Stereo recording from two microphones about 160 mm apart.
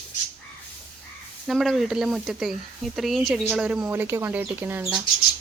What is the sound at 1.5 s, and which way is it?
Speech, centre (ahead or behind).